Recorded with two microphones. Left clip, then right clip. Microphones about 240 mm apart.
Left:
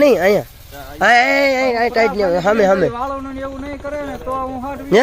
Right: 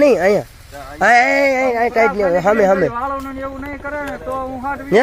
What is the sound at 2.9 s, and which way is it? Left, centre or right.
Speech, left.